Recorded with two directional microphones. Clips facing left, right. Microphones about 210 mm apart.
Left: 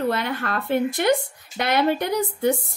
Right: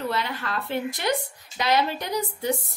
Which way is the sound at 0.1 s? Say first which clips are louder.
Left 4 dB; 55° left (ahead or behind).